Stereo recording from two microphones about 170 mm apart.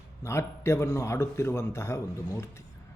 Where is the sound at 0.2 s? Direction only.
15° left (ahead or behind).